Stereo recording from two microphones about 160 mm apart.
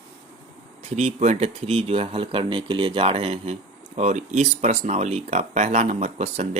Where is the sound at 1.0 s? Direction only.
45° right (ahead or behind).